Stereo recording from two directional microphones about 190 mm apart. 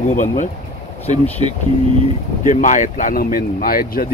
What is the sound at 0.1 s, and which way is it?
Speech, 40° left (ahead or behind).